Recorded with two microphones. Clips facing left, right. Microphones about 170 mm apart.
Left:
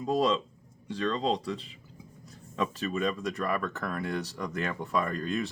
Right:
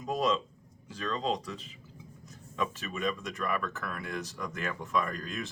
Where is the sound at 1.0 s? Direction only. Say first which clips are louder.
Left 4 dB; 35° left (ahead or behind).